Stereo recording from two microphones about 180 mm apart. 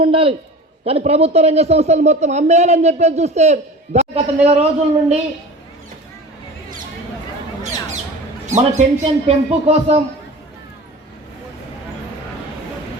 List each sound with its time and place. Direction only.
0.0 s a man's voice: 30° right (ahead or behind)
8.4 s speech: 40° right (ahead or behind)